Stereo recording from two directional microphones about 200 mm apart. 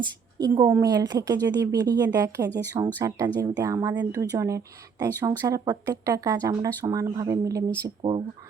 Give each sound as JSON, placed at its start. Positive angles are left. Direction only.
{"t": 0.0, "sound": "speech", "side_deg": -20}